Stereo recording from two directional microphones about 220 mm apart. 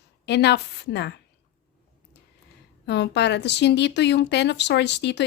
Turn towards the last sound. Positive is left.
turn(degrees=50)  # may be behind; listen again after turning